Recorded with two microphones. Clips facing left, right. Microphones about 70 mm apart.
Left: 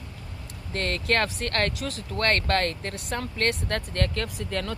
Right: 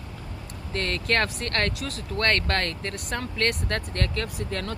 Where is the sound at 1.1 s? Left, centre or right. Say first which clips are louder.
Even; right.